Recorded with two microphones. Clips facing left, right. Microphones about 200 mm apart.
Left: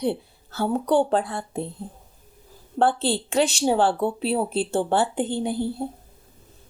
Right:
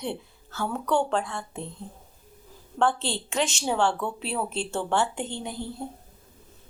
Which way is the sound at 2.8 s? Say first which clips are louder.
Left 4 dB; 35° left (ahead or behind).